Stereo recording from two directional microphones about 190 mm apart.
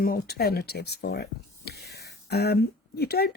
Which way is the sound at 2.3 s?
55° left (ahead or behind).